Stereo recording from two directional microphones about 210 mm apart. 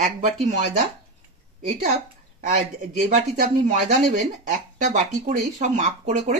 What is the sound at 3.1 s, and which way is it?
Speech, 35° right (ahead or behind).